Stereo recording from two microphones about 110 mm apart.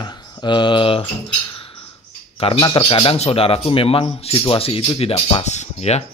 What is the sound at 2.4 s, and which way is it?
Speech, 60° left (ahead or behind).